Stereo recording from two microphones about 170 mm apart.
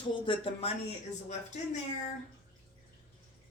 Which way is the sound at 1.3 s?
45° left (ahead or behind).